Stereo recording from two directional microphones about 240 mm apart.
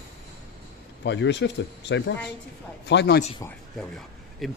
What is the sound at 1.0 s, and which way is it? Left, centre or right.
Speech, left.